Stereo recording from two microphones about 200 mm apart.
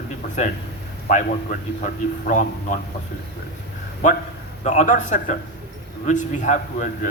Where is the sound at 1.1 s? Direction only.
40° left (ahead or behind).